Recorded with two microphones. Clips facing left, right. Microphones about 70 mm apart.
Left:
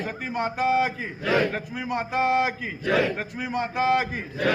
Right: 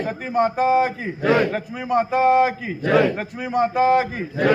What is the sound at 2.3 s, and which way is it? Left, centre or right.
Speech, right.